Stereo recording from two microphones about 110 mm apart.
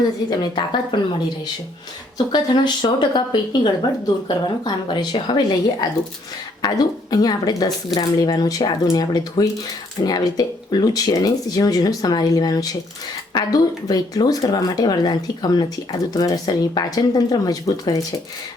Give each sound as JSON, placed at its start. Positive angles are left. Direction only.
{"t": 0.3, "sound": "speech", "side_deg": 45}
{"t": 2.1, "sound": "speech", "side_deg": 40}